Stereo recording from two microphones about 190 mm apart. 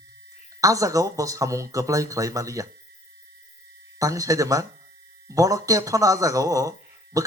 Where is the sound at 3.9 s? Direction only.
15° right (ahead or behind).